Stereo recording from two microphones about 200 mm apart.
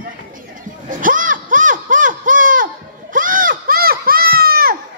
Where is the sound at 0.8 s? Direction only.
40° right (ahead or behind).